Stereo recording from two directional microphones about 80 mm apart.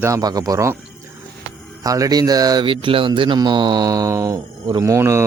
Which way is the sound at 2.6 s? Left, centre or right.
Right.